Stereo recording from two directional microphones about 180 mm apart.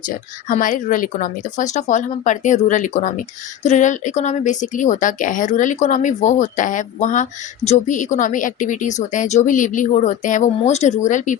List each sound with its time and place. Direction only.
0.4 s speech: 45° left (ahead or behind)